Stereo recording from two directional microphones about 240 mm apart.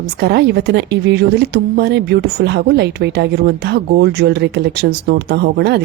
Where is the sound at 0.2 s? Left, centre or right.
Right.